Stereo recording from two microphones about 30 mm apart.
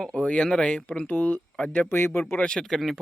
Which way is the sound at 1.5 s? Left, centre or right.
Left.